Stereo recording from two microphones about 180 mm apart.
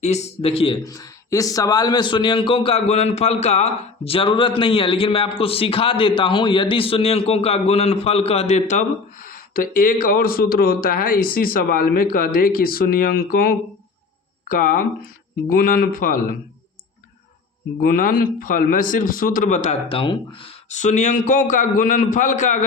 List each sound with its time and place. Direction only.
0.0 s speech: 40° left (ahead or behind)
0.9 s speech: 20° left (ahead or behind); by 16.3 s 50° left (ahead or behind)
17.7 s speech: 50° left (ahead or behind)
19.9 s speech: 30° left (ahead or behind)